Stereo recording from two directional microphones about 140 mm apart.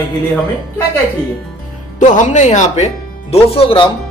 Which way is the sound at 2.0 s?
60° left (ahead or behind).